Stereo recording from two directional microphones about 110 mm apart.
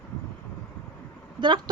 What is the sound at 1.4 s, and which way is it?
Speech, 45° right (ahead or behind).